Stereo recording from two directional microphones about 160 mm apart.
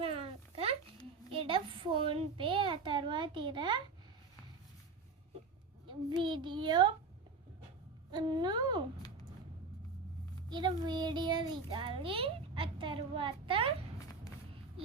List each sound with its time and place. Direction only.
0.0 s a sound: 35° right (ahead or behind)
1.3 s a child's voice: 35° right (ahead or behind)
5.8 s a child's voice: 30° right (ahead or behind)
8.1 s a woman's voice: 25° right (ahead or behind)
9.0 s a sound: 25° left (ahead or behind)
10.5 s a child's voice: 25° right (ahead or behind)